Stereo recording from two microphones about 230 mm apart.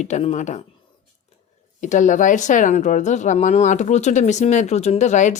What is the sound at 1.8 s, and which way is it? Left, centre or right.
Speech, left.